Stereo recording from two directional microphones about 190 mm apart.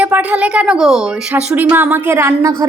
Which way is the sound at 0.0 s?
10° right (ahead or behind).